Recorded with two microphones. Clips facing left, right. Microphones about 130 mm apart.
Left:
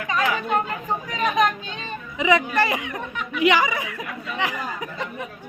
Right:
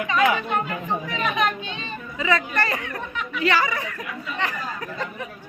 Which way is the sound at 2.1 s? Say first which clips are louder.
Left 4 dB; 15° left (ahead or behind).